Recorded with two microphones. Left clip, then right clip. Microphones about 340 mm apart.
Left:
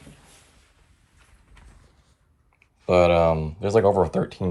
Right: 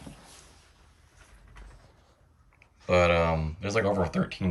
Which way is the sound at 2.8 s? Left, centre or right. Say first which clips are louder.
Left 5 dB; centre.